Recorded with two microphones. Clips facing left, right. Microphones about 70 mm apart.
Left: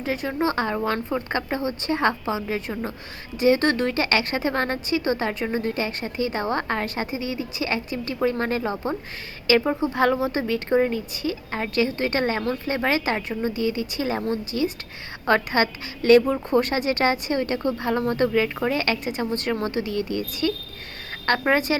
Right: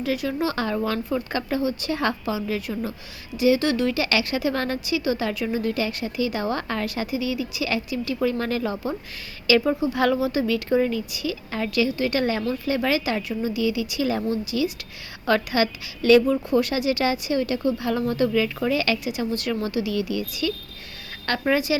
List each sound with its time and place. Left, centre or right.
0.0 s speech: left